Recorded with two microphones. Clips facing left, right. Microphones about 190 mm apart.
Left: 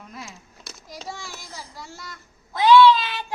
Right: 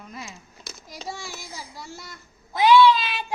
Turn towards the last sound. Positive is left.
turn(degrees=-10)  # may be behind; listen again after turning